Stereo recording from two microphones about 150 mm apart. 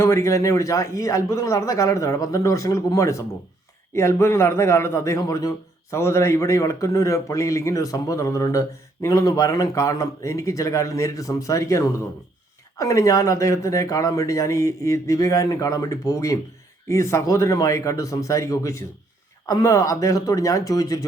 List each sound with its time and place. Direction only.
0.0 s a man's voice: 20° left (ahead or behind)